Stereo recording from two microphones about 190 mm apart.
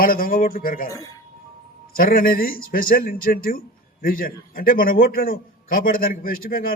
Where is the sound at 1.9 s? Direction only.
50° left (ahead or behind).